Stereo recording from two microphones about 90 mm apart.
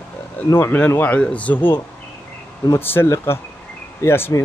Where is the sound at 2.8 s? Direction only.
25° left (ahead or behind).